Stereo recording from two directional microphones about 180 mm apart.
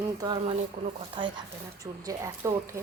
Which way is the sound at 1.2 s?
25° right (ahead or behind).